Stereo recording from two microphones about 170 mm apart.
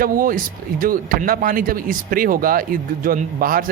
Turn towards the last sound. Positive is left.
turn(degrees=-55)  # may be behind; listen again after turning